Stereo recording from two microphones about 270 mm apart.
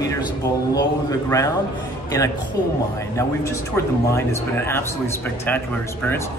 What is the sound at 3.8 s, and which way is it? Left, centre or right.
A man's voice, centre.